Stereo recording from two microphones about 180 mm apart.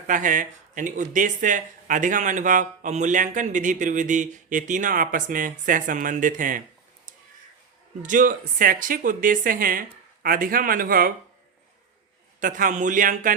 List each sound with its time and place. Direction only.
0.1 s speech: 45° right (ahead or behind)
8.0 s speech: 45° right (ahead or behind)
12.4 s speech: 50° right (ahead or behind)